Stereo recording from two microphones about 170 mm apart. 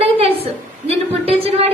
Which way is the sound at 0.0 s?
35° right (ahead or behind).